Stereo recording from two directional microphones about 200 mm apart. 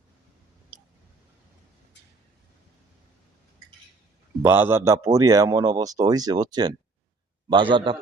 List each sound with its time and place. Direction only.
4.4 s a man's voice: 10° right (ahead or behind)